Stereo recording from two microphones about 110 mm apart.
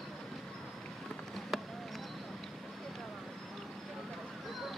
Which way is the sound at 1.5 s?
Centre (ahead or behind).